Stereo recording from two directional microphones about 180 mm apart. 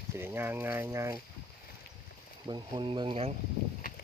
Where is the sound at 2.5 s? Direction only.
25° right (ahead or behind).